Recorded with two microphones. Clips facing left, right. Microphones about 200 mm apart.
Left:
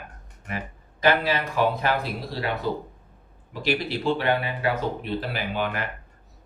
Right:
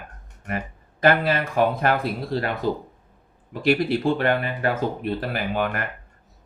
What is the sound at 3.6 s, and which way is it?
Speech, 50° right (ahead or behind).